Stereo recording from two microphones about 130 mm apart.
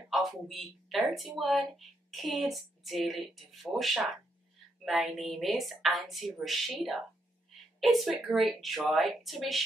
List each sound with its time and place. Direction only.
0.1 s a woman's voice: centre (ahead or behind)